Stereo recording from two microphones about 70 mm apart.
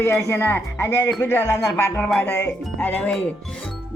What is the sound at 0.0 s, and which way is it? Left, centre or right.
Speech, left.